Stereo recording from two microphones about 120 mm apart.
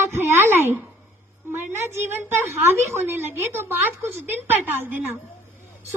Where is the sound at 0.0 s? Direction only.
20° right (ahead or behind).